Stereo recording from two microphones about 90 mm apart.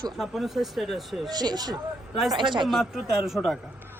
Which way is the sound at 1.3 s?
50° right (ahead or behind).